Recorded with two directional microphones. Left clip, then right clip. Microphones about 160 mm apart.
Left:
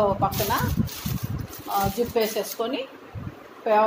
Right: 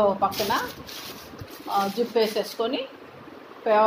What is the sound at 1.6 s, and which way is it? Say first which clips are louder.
Speech: even; 5° left (ahead or behind).